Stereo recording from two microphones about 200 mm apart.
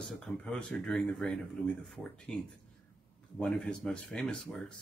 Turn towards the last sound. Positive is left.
turn(degrees=0)  # may be behind; listen again after turning